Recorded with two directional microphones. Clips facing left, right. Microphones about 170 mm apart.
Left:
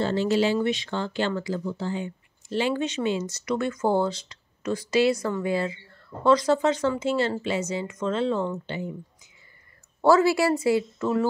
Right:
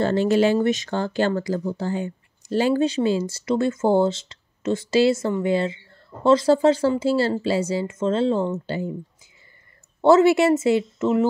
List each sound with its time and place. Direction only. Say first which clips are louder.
0.0 s speech: right 4 dB; 55° right (ahead or behind); by 9.3 s 35° right (ahead or behind)
10.0 s speech: right 4 dB; 20° right (ahead or behind)